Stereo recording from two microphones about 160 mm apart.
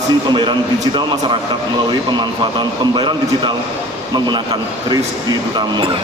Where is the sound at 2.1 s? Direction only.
30° right (ahead or behind).